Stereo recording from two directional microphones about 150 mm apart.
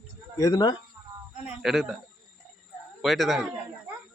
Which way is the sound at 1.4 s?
Centre (ahead or behind).